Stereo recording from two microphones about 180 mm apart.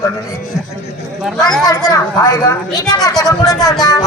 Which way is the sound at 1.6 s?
20° left (ahead or behind).